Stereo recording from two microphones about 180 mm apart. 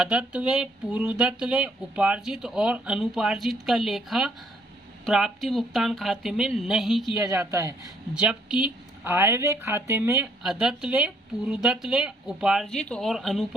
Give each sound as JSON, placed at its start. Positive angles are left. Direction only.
{"t": 0.0, "sound": "speech", "side_deg": -5}
{"t": 7.2, "sound": "a woman's voice", "side_deg": -15}
{"t": 8.1, "sound": "a woman's voice", "side_deg": -5}
{"t": 10.4, "sound": "speech", "side_deg": -5}